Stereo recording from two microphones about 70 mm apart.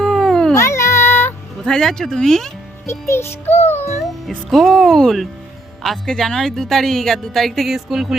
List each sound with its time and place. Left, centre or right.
0.0 s babbling: centre
0.5 s music: left
1.6 s speech: centre
2.8 s music: left
4.5 s a woman's voice: centre